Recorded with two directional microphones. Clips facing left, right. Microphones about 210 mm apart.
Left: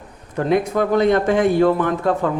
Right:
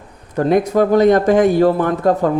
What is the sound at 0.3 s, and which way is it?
Speech, 40° right (ahead or behind).